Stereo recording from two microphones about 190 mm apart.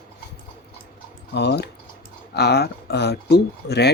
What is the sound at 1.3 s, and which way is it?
Speech, 60° left (ahead or behind).